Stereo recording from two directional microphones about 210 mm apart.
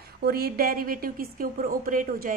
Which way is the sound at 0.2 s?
45° right (ahead or behind).